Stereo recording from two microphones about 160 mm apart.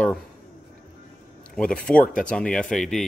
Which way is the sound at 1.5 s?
5° left (ahead or behind).